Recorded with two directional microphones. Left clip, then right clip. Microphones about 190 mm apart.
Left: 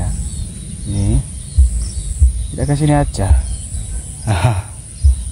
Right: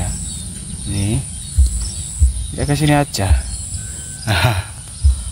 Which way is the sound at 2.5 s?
20° left (ahead or behind).